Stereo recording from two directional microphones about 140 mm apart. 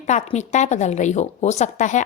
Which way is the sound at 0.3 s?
55° left (ahead or behind).